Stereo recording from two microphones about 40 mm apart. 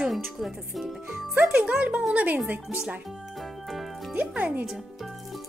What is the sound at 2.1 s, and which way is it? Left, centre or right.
Speech, right.